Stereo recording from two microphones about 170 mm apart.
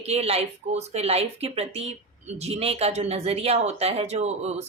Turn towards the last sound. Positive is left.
turn(degrees=-40)  # may be behind; listen again after turning